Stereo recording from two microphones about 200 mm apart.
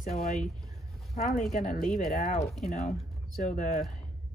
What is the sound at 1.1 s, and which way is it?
Speech, 35° left (ahead or behind).